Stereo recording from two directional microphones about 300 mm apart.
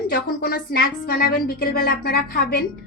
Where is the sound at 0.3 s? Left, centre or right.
Left.